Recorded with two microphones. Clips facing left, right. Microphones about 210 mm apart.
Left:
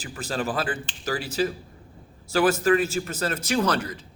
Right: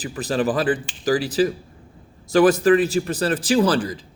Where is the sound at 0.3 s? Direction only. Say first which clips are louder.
Right 7 dB; 35° right (ahead or behind).